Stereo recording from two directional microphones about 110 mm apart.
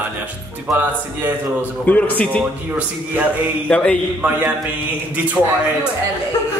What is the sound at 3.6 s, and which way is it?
Speech, 10° left (ahead or behind).